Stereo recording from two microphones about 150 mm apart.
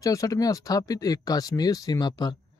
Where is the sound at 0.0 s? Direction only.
20° left (ahead or behind).